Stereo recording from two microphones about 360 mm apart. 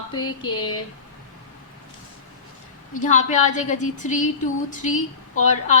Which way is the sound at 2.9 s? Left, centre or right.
Centre.